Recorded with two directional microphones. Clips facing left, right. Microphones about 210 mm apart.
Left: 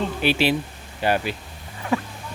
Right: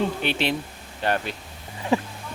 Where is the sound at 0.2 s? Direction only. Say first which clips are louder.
Left 4 dB; 5° left (ahead or behind).